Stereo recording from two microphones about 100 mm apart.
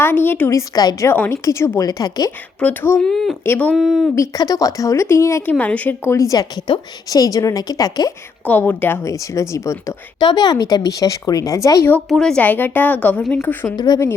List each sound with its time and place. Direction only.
0.0 s a woman's voice: 20° left (ahead or behind)
0.7 s speech: 35° left (ahead or behind)
1.0 s a woman's voice: 25° left (ahead or behind); by 2.3 s 40° left (ahead or behind)
2.6 s a woman's voice: 10° left (ahead or behind)
3.4 s a woman's voice: 20° left (ahead or behind)
3.8 s speech: 5° right (ahead or behind)
4.1 s speech: 35° left (ahead or behind)
5.5 s a woman's voice: 15° left (ahead or behind)
6.1 s speech: 35° left (ahead or behind)
8.4 s a woman's voice: 20° left (ahead or behind)
10.2 s speech: 45° left (ahead or behind)
12.0 s a woman's voice: 5° left (ahead or behind)
13.7 s speech: 40° left (ahead or behind)